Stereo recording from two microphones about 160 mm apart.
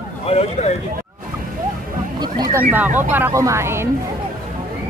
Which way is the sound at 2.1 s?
25° right (ahead or behind).